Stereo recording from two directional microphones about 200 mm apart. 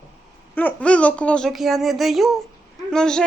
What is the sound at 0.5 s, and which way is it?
A woman's voice, 5° left (ahead or behind).